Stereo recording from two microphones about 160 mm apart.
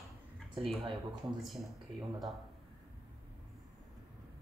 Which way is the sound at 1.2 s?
Centre (ahead or behind).